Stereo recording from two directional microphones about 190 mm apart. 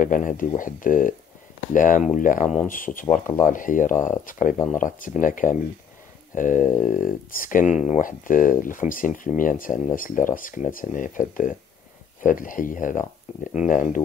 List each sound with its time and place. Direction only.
0.0 s speech: 45° left (ahead or behind)